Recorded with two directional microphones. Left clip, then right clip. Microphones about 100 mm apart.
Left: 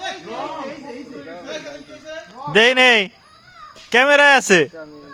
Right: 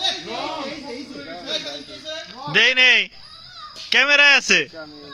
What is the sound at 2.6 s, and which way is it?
Speech, 55° left (ahead or behind).